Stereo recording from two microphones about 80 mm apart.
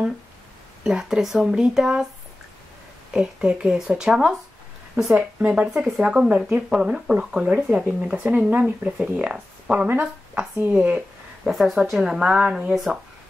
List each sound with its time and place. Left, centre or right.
0.8 s speech: centre
3.1 s speech: centre
11.4 s speech: centre